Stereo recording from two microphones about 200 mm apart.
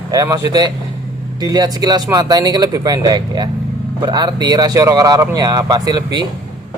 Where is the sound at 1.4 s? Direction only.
20° right (ahead or behind).